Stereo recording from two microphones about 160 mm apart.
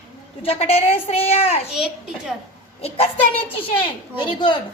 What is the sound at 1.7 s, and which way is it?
Speech, 5° right (ahead or behind).